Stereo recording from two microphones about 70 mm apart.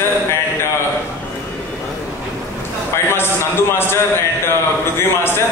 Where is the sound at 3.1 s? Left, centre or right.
Left.